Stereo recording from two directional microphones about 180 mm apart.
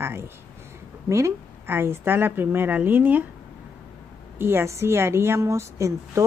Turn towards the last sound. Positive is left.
turn(degrees=-15)  # may be behind; listen again after turning